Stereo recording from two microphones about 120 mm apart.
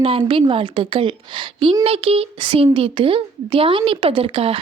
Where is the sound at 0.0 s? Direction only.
45° right (ahead or behind).